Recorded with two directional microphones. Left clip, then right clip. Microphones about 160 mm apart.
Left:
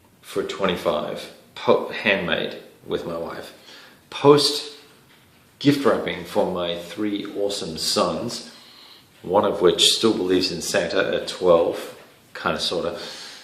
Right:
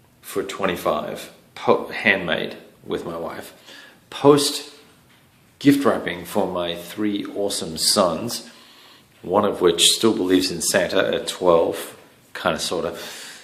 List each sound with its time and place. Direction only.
0.3 s speech: 45° right (ahead or behind)
5.5 s speech: 45° right (ahead or behind)
9.3 s speech: 40° right (ahead or behind)